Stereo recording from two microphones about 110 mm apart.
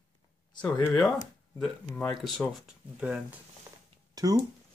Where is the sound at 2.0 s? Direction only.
5° left (ahead or behind).